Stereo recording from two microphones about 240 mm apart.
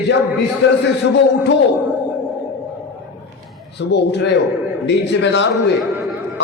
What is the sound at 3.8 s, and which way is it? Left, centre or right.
Speech, left.